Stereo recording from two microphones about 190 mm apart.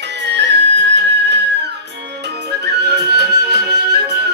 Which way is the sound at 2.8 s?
60° right (ahead or behind).